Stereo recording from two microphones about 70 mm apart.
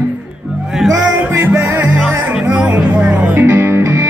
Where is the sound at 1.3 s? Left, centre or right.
Right.